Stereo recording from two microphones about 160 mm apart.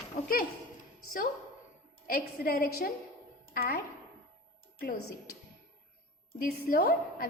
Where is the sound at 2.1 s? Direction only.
65° left (ahead or behind).